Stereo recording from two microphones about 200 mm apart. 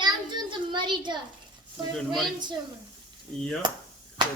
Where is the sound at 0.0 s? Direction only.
20° right (ahead or behind).